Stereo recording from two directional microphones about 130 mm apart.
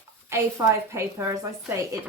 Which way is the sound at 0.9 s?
25° right (ahead or behind).